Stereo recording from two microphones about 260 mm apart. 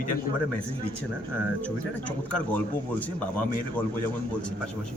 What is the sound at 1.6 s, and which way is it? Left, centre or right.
Speech, centre.